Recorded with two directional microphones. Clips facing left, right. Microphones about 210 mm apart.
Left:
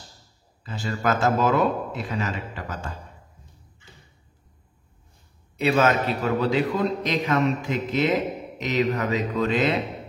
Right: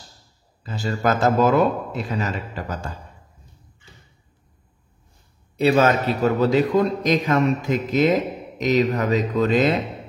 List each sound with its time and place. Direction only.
0.7 s a man's voice: 40° right (ahead or behind)
5.6 s a man's voice: 40° right (ahead or behind)